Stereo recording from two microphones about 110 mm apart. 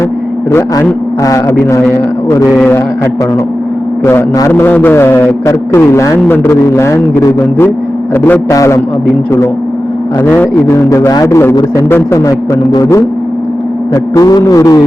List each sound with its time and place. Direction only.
0.5 s a man's voice: 20° left (ahead or behind)
1.2 s a sound: 30° left (ahead or behind)
4.4 s a man's voice: 25° left (ahead or behind)
8.1 s a man's voice: 15° left (ahead or behind)
8.4 s a man's voice: 30° left (ahead or behind)
10.2 s a man's voice: 15° left (ahead or behind)
10.8 s a man's voice: 30° left (ahead or behind)
13.9 s a sound: 30° left (ahead or behind)